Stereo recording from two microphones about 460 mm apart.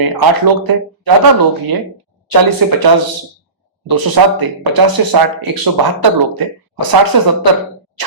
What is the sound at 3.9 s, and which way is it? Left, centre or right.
Speech, right.